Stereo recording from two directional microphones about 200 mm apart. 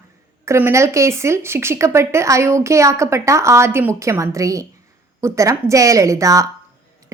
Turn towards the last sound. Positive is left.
turn(degrees=-15)  # may be behind; listen again after turning